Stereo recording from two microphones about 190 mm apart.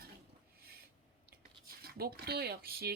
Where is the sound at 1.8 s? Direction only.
55° right (ahead or behind).